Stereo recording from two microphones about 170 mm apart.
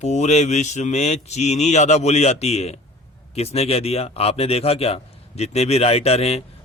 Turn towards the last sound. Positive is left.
turn(degrees=35)  # may be behind; listen again after turning